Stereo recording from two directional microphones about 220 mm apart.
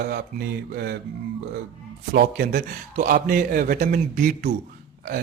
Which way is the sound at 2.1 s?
40° right (ahead or behind).